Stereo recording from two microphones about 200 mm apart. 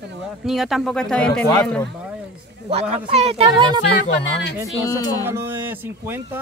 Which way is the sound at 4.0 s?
60° left (ahead or behind).